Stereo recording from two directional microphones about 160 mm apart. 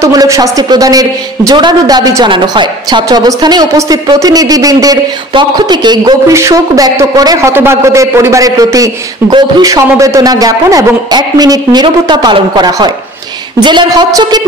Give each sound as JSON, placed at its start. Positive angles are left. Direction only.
{"t": 0.0, "sound": "a man's voice", "side_deg": -20}